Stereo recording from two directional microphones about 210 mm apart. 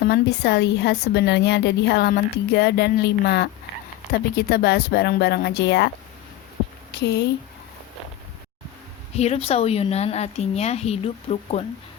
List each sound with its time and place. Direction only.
0.0 s a woman's voice: 50° left (ahead or behind)
6.9 s a woman's voice: 55° left (ahead or behind)
9.1 s speech: 30° left (ahead or behind)